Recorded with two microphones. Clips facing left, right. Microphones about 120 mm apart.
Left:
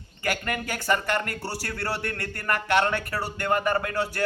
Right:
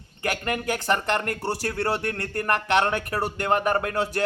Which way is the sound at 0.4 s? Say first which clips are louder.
Right 4 dB; 25° right (ahead or behind).